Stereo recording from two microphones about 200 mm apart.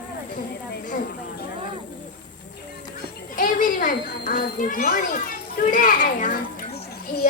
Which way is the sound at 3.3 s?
40° left (ahead or behind).